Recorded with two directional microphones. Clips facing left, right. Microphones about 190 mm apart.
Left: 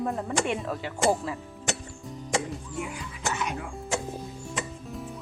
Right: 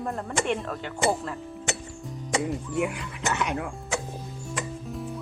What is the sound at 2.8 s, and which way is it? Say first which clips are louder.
Speech: right 5 dB; 65° right (ahead or behind).